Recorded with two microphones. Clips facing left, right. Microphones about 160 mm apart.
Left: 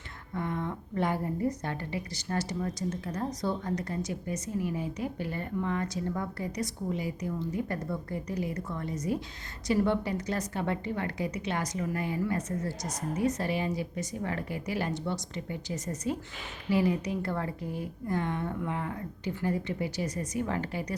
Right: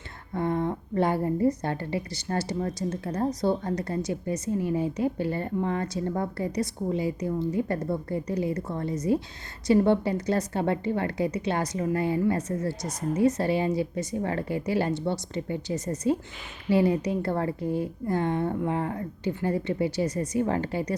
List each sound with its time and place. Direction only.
0.3 s a woman's voice: 35° right (ahead or behind)